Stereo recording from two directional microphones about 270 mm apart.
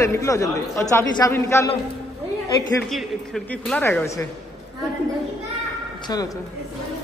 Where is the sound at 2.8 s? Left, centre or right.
Centre.